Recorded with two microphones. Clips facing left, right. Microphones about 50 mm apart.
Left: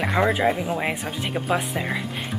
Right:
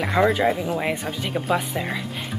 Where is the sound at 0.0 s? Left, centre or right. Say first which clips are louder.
Right 1 dB; centre.